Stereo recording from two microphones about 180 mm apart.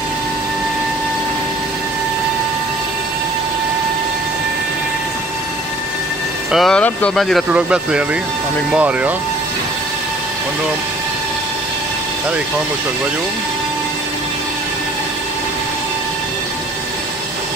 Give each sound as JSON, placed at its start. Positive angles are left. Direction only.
{"t": 6.5, "sound": "speech", "side_deg": 5}